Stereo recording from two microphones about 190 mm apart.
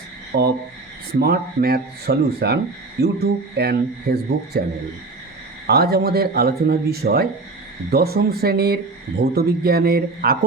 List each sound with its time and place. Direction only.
0.3 s speech: 60° right (ahead or behind)
5.6 s speech: 55° right (ahead or behind)